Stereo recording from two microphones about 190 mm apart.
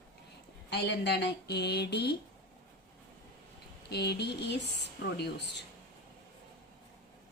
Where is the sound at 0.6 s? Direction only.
65° left (ahead or behind).